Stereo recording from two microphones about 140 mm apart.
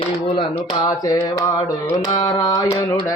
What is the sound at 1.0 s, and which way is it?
Mantra, 25° left (ahead or behind).